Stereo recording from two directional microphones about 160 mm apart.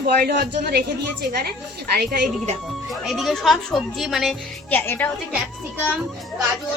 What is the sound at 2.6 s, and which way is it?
A woman's voice, centre (ahead or behind).